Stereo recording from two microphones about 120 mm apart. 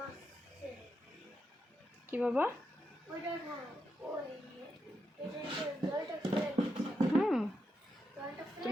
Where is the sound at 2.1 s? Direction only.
10° right (ahead or behind).